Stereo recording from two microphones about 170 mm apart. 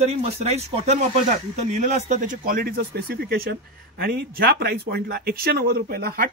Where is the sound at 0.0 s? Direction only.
40° right (ahead or behind).